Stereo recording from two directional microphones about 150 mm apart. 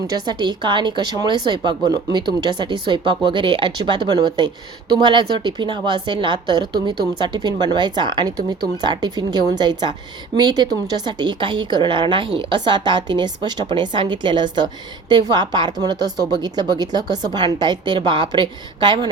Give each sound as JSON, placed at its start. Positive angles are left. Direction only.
{"t": 0.1, "sound": "a woman's voice", "side_deg": -30}